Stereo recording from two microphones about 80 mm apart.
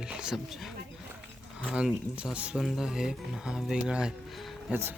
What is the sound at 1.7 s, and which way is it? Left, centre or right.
Speech, centre.